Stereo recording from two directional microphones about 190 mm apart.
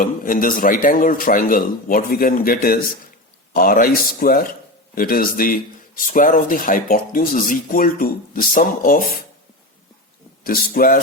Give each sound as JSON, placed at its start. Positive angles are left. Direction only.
{"t": 0.0, "sound": "speech", "side_deg": 45}
{"t": 10.4, "sound": "speech", "side_deg": 50}